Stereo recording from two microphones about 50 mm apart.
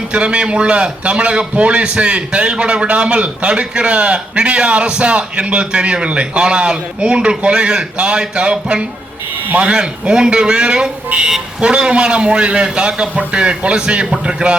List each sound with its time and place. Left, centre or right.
0.1 s a man's voice: right